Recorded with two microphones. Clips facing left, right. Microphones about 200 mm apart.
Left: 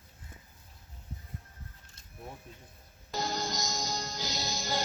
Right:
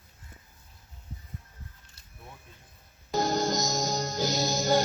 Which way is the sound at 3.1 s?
50° right (ahead or behind).